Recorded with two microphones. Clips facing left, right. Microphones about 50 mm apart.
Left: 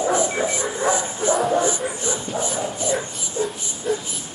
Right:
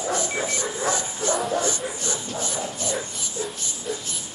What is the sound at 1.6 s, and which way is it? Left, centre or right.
Shuffle, centre.